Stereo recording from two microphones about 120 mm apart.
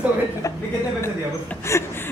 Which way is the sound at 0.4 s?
30° left (ahead or behind).